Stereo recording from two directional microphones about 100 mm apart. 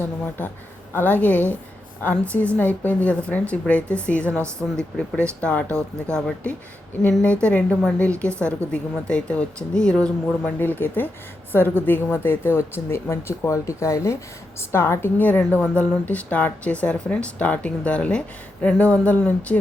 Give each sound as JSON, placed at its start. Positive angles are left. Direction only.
{"t": 0.9, "sound": "a woman's voice", "side_deg": 20}
{"t": 10.6, "sound": "a woman's voice", "side_deg": 20}